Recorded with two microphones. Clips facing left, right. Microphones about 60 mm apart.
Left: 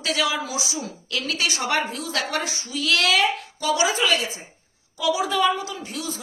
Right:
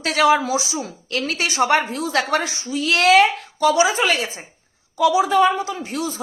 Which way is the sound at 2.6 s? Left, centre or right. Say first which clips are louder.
Right 4 dB; right.